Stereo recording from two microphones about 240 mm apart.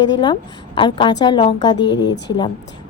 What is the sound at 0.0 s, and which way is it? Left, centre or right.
A woman's voice, centre.